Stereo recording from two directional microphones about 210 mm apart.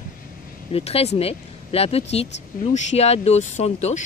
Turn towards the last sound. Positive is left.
turn(degrees=30)  # may be behind; listen again after turning